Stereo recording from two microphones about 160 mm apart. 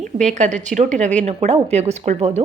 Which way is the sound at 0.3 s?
45° right (ahead or behind).